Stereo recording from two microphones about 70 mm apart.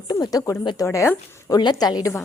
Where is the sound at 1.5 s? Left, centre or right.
Left.